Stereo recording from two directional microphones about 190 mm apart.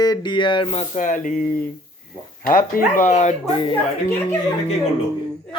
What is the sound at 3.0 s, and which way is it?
Speech, 40° left (ahead or behind).